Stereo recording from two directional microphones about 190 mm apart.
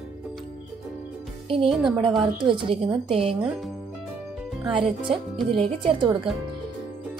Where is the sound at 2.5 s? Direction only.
25° right (ahead or behind).